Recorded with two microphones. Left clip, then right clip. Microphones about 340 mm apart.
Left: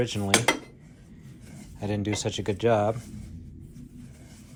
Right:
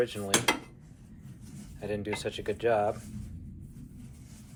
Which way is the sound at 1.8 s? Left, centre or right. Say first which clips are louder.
Left 3 dB; centre.